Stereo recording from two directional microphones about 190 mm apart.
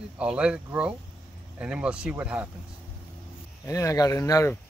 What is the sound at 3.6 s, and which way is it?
Speech, 15° left (ahead or behind).